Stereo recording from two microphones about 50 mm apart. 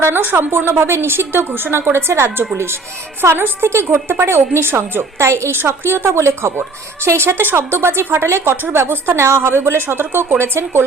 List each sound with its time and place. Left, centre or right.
0.0 s a woman's voice: right
5.5 s a woman's voice: right